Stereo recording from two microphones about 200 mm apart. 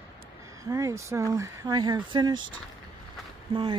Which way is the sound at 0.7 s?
15° right (ahead or behind).